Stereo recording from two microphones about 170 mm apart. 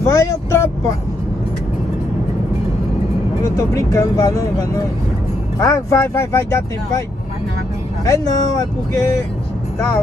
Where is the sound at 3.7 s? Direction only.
20° left (ahead or behind).